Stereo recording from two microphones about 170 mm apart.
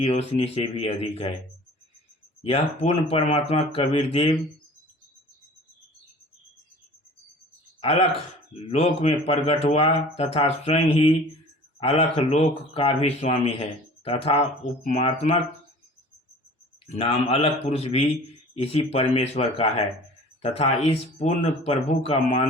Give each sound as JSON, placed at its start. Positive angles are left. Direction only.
{"t": 0.0, "sound": "speech", "side_deg": 40}
{"t": 2.4, "sound": "speech", "side_deg": 35}
{"t": 8.5, "sound": "speech", "side_deg": 35}
{"t": 16.8, "sound": "speech", "side_deg": 35}